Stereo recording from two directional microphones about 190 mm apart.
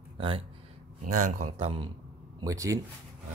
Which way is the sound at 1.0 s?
40° right (ahead or behind).